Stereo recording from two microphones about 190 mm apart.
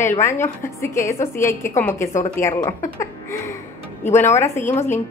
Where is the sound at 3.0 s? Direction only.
15° left (ahead or behind).